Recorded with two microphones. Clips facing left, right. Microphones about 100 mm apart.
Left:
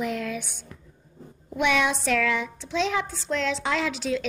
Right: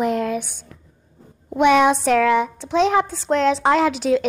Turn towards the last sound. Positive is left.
turn(degrees=-55)  # may be behind; listen again after turning